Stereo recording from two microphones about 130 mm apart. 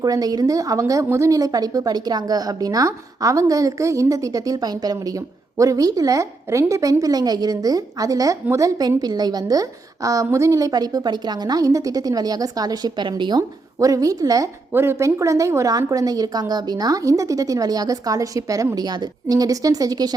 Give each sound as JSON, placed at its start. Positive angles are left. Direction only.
{"t": 0.0, "sound": "a woman's voice", "side_deg": -30}